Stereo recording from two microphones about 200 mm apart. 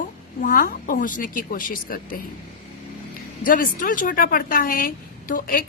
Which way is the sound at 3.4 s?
45° left (ahead or behind).